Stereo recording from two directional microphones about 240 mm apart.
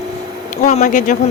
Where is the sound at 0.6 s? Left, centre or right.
Left.